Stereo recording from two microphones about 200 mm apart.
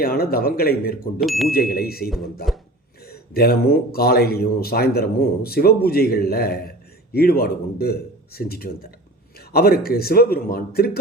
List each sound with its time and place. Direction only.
0.0 s speech: 50° left (ahead or behind)
1.2 s speech: centre (ahead or behind)
1.5 s speech: 50° left (ahead or behind)
2.0 s speech: centre (ahead or behind)
3.1 s speech: 50° left (ahead or behind)